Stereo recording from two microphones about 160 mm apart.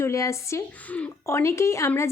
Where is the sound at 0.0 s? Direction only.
20° left (ahead or behind).